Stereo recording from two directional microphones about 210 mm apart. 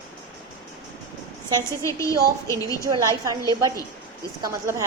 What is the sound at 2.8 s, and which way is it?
A woman's voice, 15° right (ahead or behind).